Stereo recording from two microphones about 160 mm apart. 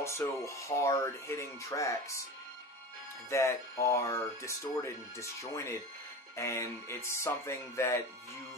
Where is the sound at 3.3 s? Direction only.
20° left (ahead or behind).